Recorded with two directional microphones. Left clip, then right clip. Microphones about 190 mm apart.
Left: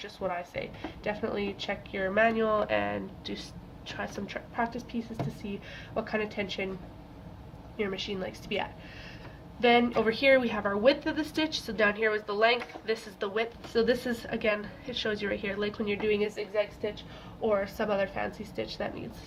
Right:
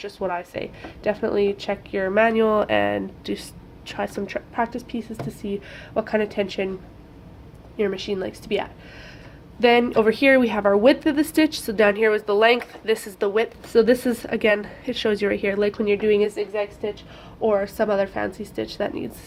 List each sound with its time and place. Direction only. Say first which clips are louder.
0.0 s a woman's voice: right 7 dB; 55° right (ahead or behind)
7.8 s a woman's voice: right 9 dB; 55° right (ahead or behind)
17.4 s a woman's voice: right 8 dB; 55° right (ahead or behind)